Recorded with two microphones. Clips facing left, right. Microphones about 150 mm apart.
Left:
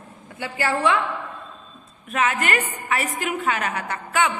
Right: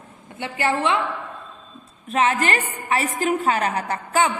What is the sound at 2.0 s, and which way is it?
A woman's voice, 30° right (ahead or behind).